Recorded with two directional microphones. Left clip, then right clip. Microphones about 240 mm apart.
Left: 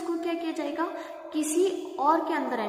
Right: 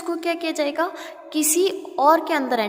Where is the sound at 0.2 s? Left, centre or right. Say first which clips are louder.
Right 7 dB; right.